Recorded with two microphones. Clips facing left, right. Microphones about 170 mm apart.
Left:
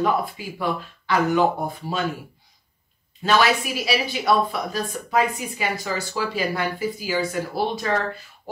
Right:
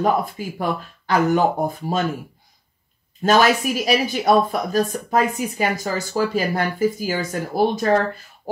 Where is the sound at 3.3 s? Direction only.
45° right (ahead or behind).